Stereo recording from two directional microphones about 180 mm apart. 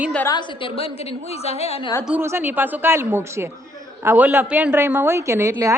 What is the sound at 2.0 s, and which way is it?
A woman's voice, 10° right (ahead or behind).